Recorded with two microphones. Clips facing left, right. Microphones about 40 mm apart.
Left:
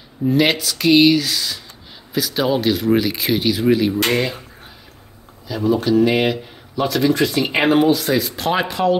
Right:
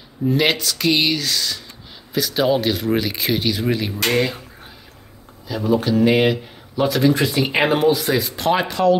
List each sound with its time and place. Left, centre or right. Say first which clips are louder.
0.2 s speech: left 2 dB; centre
5.7 s speech: left 1 dB; centre